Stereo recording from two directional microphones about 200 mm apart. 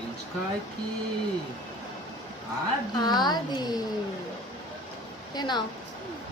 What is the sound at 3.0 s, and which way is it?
Speech, 20° left (ahead or behind).